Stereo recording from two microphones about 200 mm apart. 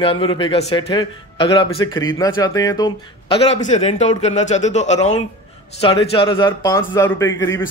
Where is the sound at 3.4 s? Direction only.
35° left (ahead or behind).